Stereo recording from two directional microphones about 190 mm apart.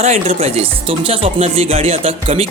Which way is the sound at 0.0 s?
35° right (ahead or behind).